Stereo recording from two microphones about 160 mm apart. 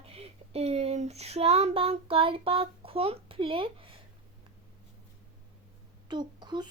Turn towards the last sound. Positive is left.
turn(degrees=-25)  # may be behind; listen again after turning